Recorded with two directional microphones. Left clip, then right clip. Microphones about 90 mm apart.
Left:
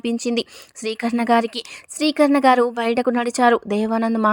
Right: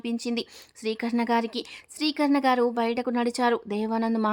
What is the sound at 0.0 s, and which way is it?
A woman's voice, 50° left (ahead or behind).